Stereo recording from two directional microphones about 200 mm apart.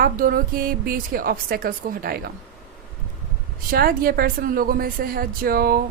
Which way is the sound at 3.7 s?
50° right (ahead or behind).